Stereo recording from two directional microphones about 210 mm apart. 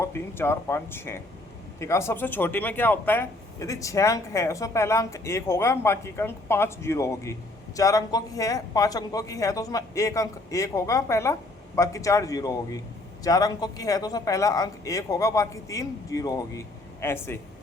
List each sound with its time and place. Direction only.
0.0 s speech: 10° left (ahead or behind)